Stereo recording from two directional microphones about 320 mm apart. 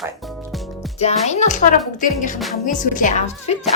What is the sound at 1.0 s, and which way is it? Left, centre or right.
A woman's voice, centre.